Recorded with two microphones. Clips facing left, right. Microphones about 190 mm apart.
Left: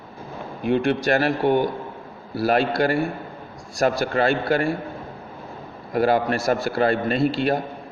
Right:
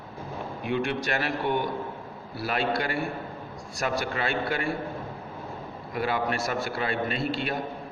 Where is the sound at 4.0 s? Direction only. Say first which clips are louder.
Left 8 dB; 40° left (ahead or behind).